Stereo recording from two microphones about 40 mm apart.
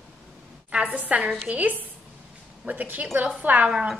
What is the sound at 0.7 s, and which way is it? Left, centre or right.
A woman's voice, right.